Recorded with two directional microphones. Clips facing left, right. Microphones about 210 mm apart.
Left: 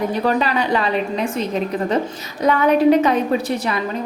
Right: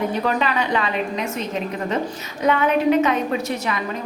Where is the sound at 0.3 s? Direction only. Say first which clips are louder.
Left 5 dB; 35° left (ahead or behind).